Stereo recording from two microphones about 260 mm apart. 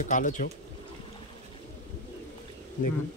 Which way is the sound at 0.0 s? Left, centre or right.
Left.